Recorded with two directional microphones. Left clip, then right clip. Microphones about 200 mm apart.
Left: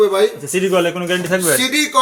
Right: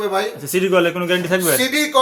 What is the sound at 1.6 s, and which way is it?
Speech, 20° right (ahead or behind).